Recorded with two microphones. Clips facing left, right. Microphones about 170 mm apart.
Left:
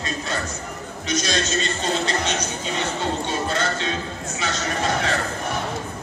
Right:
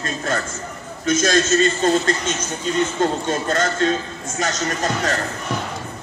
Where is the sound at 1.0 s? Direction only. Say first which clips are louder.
Right 7 dB; 50° right (ahead or behind).